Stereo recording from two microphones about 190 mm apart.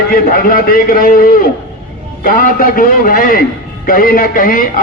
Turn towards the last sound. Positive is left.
turn(degrees=50)  # may be behind; listen again after turning